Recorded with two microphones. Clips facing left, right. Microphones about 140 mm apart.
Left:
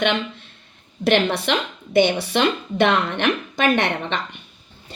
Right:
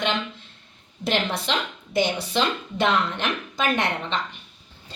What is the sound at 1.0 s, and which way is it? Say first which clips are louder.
Speech: left 6 dB; 65° left (ahead or behind).